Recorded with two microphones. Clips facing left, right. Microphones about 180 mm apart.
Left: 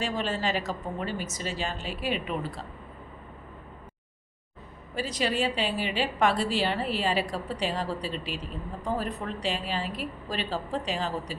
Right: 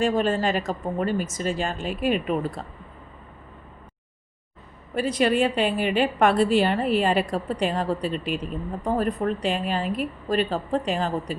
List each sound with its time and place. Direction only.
0.0 s a woman's voice: 50° right (ahead or behind)
4.9 s a woman's voice: 55° right (ahead or behind)